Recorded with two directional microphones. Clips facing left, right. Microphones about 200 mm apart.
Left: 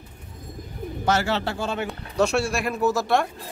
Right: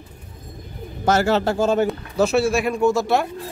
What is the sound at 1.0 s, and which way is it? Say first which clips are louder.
Speech: right 6 dB; 45° right (ahead or behind).